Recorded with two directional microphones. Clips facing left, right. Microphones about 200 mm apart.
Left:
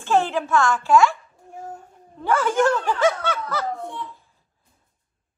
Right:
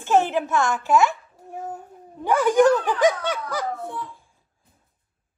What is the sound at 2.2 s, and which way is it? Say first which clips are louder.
Speech: right 3 dB; 15° right (ahead or behind).